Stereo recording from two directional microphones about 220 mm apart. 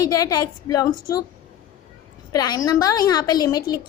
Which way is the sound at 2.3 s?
15° left (ahead or behind).